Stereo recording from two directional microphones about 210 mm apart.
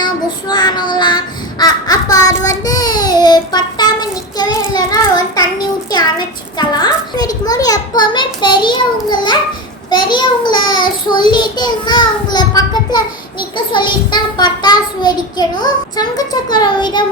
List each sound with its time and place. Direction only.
0.0 s child singing: 20° left (ahead or behind)
5.9 s a sound: 20° left (ahead or behind)
9.9 s child singing: 20° left (ahead or behind)